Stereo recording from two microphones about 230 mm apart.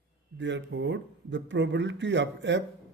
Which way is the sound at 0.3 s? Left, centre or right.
Right.